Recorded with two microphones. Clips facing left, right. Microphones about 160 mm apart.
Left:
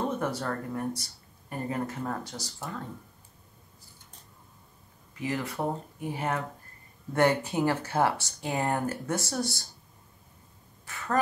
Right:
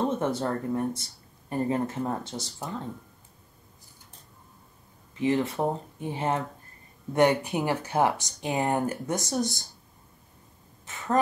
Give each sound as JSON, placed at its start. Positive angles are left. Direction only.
{"t": 0.2, "sound": "speech", "side_deg": -25}
{"t": 5.2, "sound": "speech", "side_deg": -25}
{"t": 10.9, "sound": "a sound", "side_deg": -20}